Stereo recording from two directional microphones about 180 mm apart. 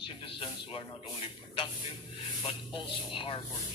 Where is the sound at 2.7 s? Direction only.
30° left (ahead or behind).